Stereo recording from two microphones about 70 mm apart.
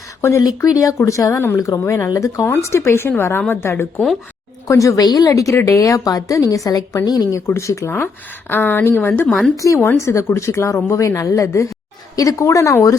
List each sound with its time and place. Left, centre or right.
0.2 s speech: left
0.4 s speech: left
1.8 s a woman's voice: left
2.0 s a woman's voice: left
4.7 s a woman's voice: left
7.3 s speech: left
7.9 s a woman's voice: left
9.6 s speech: left